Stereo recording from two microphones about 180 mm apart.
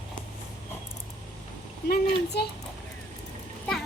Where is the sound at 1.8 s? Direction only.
60° left (ahead or behind).